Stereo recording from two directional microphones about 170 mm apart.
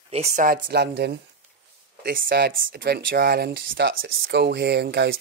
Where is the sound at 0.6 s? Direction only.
80° right.